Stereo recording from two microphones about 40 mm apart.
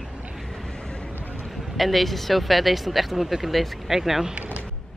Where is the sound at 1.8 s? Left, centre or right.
Centre.